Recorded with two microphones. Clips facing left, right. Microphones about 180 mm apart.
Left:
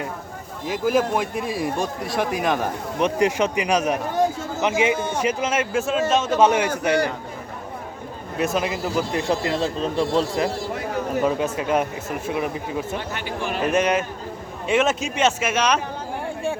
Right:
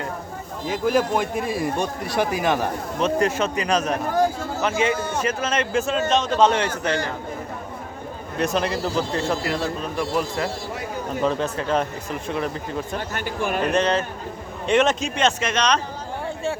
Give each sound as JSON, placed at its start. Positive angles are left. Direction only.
{"t": 0.7, "sound": "speech", "side_deg": 0}
{"t": 3.0, "sound": "a man's voice", "side_deg": 15}
{"t": 4.1, "sound": "a sound", "side_deg": 20}
{"t": 5.1, "sound": "a man's voice", "side_deg": 10}
{"t": 8.4, "sound": "a man's voice", "side_deg": 5}
{"t": 11.2, "sound": "a man's voice", "side_deg": 10}
{"t": 13.1, "sound": "a man's voice", "side_deg": -50}
{"t": 13.7, "sound": "a man's voice", "side_deg": 10}